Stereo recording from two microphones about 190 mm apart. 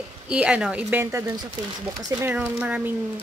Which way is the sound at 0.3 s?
5° right (ahead or behind).